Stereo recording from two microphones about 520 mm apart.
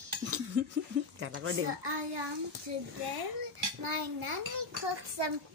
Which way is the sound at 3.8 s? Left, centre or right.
Right.